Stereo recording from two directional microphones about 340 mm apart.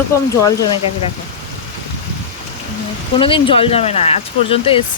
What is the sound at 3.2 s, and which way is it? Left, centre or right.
Speech, centre.